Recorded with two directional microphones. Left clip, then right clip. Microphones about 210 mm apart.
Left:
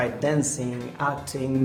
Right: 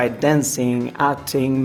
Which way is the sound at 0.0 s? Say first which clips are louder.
Right 6 dB; 35° right (ahead or behind).